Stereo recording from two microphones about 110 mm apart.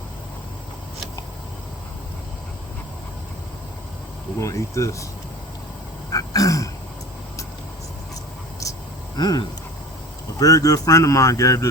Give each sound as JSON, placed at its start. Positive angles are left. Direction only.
{"t": 4.4, "sound": "speech", "side_deg": 30}
{"t": 6.1, "sound": "throat clearing", "side_deg": 30}
{"t": 8.6, "sound": "a sound", "side_deg": 30}
{"t": 9.1, "sound": "speech", "side_deg": 40}